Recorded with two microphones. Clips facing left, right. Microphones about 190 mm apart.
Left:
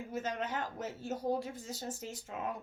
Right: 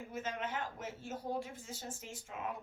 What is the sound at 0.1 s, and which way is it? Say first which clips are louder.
Speech: left 3 dB; 40° left (ahead or behind).